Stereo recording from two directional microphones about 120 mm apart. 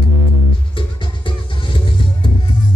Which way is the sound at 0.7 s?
45° left (ahead or behind).